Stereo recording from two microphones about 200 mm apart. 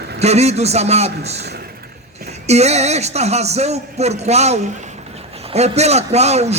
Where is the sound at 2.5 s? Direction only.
35° right (ahead or behind).